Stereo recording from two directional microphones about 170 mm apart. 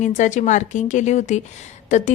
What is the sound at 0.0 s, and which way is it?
A woman's voice, 45° left (ahead or behind).